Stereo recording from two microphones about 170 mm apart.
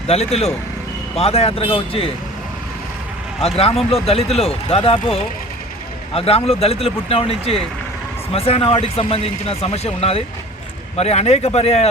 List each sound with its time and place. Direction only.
0.1 s a man's voice: 35° left (ahead or behind)
3.4 s a man's voice: 35° left (ahead or behind)